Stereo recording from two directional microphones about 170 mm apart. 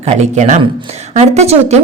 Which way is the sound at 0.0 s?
40° right (ahead or behind).